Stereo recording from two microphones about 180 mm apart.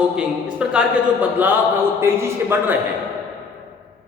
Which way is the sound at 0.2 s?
5° right (ahead or behind).